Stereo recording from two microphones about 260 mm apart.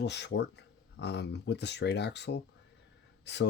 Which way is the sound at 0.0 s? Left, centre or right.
Left.